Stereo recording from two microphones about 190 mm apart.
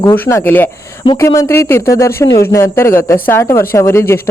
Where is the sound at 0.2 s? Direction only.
10° left (ahead or behind).